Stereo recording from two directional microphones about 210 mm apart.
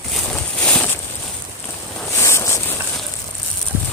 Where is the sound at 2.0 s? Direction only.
10° left (ahead or behind).